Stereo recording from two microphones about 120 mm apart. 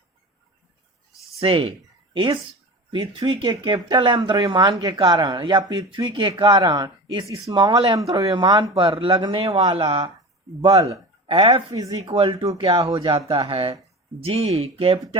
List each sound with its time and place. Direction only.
1.4 s speech: 50° right (ahead or behind)
9.7 s speech: 50° right (ahead or behind)
11.3 s speech: 40° right (ahead or behind)
12.0 s speech: 50° right (ahead or behind)